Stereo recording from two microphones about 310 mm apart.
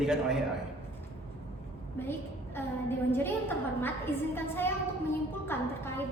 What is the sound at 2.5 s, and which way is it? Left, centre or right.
A woman's voice, centre.